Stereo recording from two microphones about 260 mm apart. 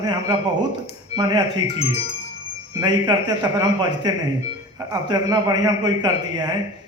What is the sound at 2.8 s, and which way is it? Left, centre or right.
A man's voice, centre.